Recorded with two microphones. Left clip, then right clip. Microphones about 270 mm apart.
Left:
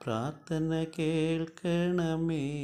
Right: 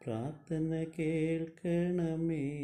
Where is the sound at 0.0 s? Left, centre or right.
Centre.